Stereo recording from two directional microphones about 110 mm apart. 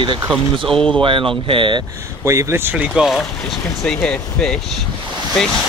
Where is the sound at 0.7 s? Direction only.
5° left (ahead or behind).